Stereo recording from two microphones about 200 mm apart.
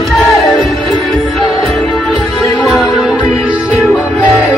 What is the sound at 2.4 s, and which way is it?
Music, 15° left (ahead or behind).